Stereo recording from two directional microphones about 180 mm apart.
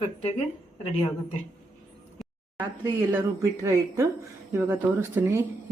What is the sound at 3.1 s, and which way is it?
Speech, 15° right (ahead or behind).